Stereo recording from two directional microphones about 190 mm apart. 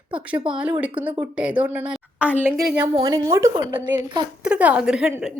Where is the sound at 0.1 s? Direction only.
5° right (ahead or behind).